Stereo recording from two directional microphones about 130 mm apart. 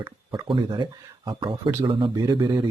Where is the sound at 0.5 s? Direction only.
35° right (ahead or behind).